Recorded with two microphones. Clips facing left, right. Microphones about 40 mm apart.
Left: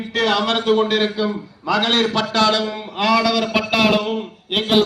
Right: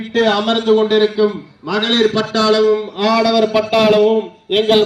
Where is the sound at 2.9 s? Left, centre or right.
Left.